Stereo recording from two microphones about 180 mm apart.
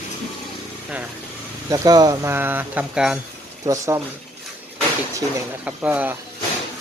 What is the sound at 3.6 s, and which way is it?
Speech, 15° right (ahead or behind).